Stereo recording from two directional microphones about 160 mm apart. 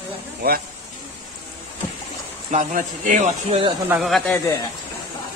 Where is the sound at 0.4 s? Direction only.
70° right (ahead or behind).